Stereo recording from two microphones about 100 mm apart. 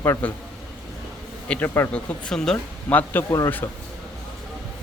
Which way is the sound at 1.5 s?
20° left (ahead or behind).